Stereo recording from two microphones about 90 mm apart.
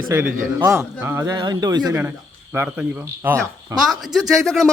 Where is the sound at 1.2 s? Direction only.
50° right (ahead or behind).